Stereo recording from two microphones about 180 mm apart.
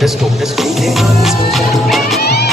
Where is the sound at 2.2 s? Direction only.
65° left (ahead or behind).